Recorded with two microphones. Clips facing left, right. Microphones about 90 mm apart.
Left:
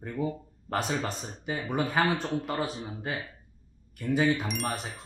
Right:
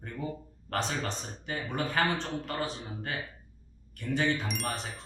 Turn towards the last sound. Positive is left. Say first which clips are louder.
# left 2 dB
turn(degrees=5)  # may be behind; listen again after turning